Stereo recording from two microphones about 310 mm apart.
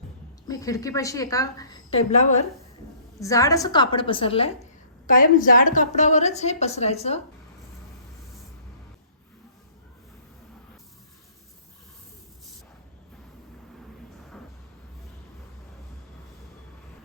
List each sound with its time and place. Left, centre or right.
0.4 s a woman's voice: centre
3.2 s a woman's voice: centre
14.3 s vehicle: centre